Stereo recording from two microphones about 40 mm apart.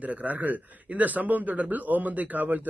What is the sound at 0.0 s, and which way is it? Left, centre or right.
Speech, right.